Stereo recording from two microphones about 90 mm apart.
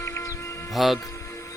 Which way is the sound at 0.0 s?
35° left (ahead or behind).